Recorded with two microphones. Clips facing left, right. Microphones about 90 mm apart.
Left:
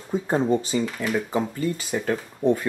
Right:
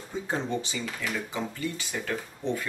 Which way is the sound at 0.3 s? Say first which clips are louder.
Left 9 dB; 45° left (ahead or behind).